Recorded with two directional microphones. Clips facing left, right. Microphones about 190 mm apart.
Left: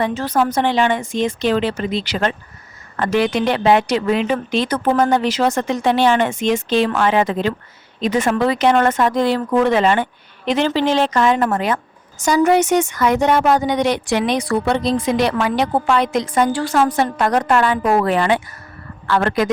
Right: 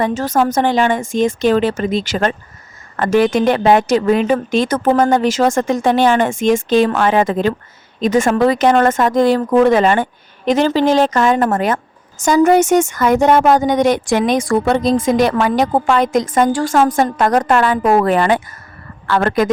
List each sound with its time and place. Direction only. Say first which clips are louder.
0.0 s speech: right 3 dB; 45° right (ahead or behind)